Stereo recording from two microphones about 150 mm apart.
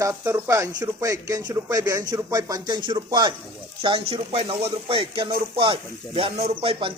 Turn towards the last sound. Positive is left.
turn(degrees=-35)  # may be behind; listen again after turning